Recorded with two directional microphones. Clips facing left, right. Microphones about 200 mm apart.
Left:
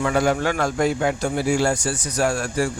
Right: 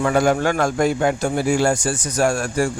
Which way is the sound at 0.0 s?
45° right (ahead or behind).